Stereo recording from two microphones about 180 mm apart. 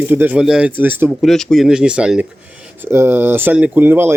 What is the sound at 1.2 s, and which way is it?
Speech, centre (ahead or behind).